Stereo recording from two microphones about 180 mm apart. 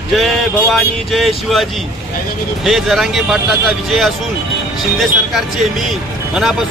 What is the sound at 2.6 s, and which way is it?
Speech, centre (ahead or behind).